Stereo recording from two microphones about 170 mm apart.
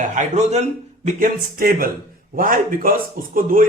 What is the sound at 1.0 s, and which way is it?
A man's voice, 55° right (ahead or behind).